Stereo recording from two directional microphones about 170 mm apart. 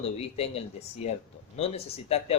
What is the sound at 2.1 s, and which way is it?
Speech, 35° left (ahead or behind).